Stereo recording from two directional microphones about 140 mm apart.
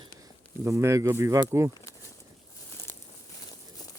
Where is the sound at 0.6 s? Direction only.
20° right (ahead or behind).